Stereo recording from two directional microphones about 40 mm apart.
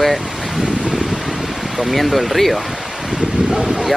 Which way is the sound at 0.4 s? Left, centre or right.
Centre.